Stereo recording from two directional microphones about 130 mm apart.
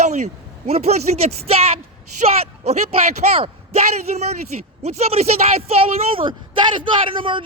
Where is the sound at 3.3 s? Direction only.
50° right (ahead or behind).